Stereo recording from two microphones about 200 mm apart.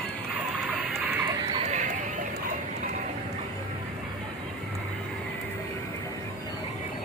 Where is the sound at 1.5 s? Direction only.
35° right (ahead or behind).